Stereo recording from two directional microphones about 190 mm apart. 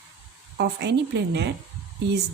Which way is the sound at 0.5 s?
60° right (ahead or behind).